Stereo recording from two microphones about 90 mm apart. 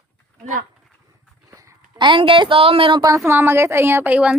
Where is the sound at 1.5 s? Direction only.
35° right (ahead or behind).